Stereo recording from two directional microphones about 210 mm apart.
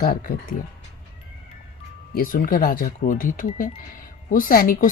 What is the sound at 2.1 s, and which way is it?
A woman's voice, 40° left (ahead or behind).